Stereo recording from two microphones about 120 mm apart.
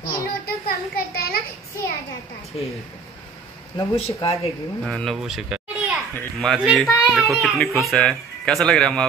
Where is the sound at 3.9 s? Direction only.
55° left (ahead or behind).